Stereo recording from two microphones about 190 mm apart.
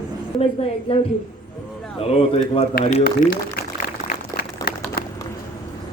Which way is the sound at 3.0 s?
55° left (ahead or behind).